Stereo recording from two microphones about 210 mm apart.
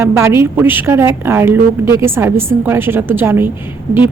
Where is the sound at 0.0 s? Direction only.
10° right (ahead or behind).